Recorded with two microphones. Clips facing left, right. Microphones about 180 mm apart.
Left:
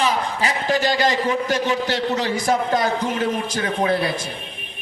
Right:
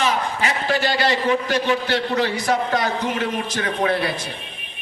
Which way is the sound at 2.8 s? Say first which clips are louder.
Left 2 dB; 35° left (ahead or behind).